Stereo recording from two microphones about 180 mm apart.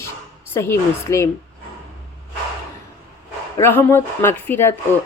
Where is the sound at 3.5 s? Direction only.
15° left (ahead or behind).